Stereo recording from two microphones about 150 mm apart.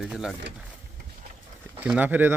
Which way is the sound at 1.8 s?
10° right (ahead or behind).